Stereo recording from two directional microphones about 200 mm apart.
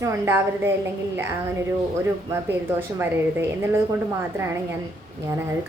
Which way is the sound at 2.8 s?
10° right (ahead or behind).